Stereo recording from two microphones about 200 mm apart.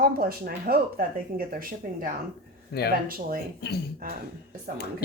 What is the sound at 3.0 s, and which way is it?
Speech, 45° right (ahead or behind).